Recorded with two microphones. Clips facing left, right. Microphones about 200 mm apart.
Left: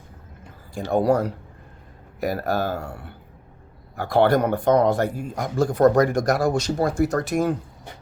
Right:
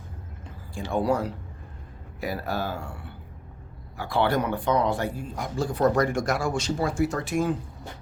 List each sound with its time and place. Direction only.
0.7 s speech: 40° left (ahead or behind)